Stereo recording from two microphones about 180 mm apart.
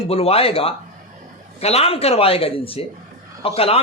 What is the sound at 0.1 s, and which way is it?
Speech, 35° left (ahead or behind).